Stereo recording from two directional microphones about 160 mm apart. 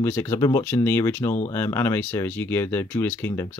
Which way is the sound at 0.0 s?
15° left (ahead or behind).